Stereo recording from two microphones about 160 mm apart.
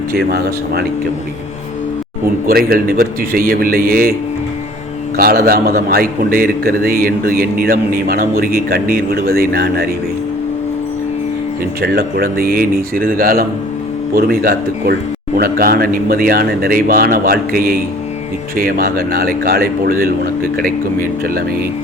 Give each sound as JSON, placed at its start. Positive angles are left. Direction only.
{"t": 0.1, "sound": "speech", "side_deg": -80}
{"t": 2.5, "sound": "speech", "side_deg": -70}
{"t": 5.1, "sound": "a man's voice", "side_deg": -70}
{"t": 11.8, "sound": "a man's voice", "side_deg": -75}